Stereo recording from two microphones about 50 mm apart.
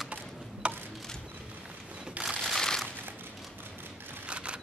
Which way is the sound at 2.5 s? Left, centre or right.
Centre.